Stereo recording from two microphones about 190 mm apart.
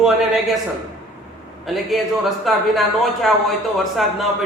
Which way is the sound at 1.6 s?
Centre (ahead or behind).